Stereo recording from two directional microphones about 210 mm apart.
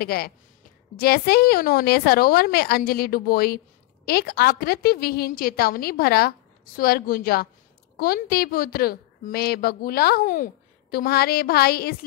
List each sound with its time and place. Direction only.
0.0 s a woman's voice: 45° left (ahead or behind)